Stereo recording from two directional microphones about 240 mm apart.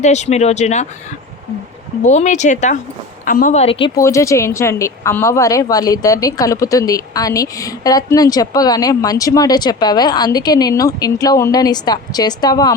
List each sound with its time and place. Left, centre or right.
0.0 s speech: left
2.0 s a woman's voice: left